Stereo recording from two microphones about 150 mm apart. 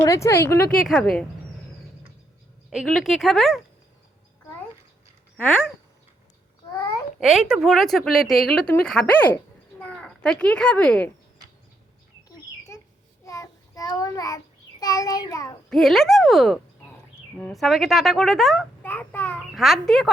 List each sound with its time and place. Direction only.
0.0 s speech: 20° left (ahead or behind)
0.9 s a woman's voice: centre (ahead or behind)
2.6 s a woman's voice: centre (ahead or behind)
7.2 s a woman's voice: 5° right (ahead or behind)
12.3 s a sound: 20° left (ahead or behind)
13.2 s child singing: 20° left (ahead or behind)
15.7 s a woman's voice: centre (ahead or behind)
18.8 s a sound: 10° left (ahead or behind)
19.5 s a woman's voice: centre (ahead or behind)